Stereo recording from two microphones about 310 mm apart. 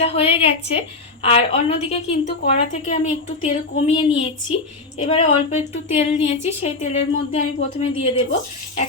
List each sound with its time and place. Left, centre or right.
0.0 s a woman's voice: centre